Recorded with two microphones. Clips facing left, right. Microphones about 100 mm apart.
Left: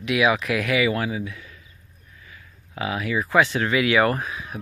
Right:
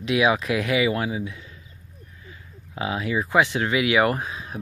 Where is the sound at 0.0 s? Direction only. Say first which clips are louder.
Even; 30° right (ahead or behind).